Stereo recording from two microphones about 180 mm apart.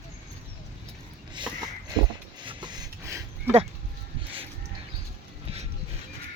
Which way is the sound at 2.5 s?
25° right (ahead or behind).